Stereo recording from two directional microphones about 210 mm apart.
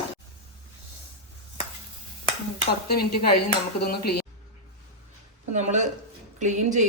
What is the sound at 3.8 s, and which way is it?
Speech, 50° left (ahead or behind).